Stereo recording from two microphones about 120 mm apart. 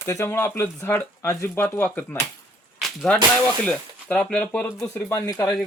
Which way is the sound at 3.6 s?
5° left (ahead or behind).